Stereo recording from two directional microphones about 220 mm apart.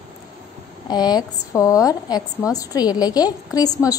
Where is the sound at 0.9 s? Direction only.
20° left (ahead or behind).